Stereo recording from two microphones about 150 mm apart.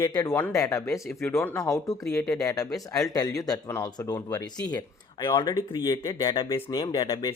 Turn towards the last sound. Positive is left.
turn(degrees=30)  # may be behind; listen again after turning